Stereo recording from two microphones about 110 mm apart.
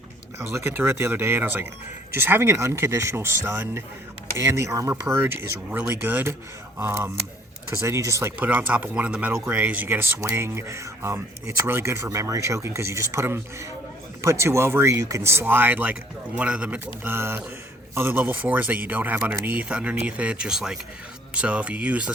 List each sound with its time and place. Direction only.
0.3 s speech: 20° right (ahead or behind)
8.4 s speech: 15° right (ahead or behind)
9.3 s speech: 25° right (ahead or behind)